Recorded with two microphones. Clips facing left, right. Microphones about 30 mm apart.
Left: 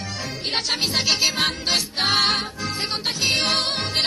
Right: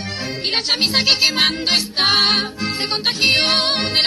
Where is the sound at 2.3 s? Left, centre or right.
Right.